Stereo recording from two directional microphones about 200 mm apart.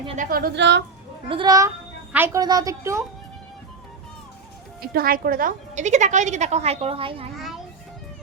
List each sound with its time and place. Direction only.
0.2 s a woman's voice: 45° right (ahead or behind)
1.3 s a child's voice: 20° right (ahead or behind)
4.8 s a woman's voice: 45° right (ahead or behind); by 7.3 s 25° right (ahead or behind)